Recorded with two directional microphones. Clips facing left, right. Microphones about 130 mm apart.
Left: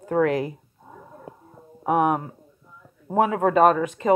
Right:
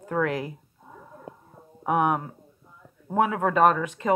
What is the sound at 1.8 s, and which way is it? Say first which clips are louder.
Speech: left 3 dB; 35° left (ahead or behind).